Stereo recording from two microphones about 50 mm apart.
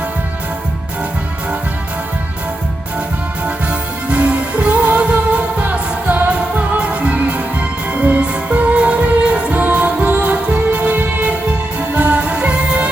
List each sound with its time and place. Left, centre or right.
3.4 s music: right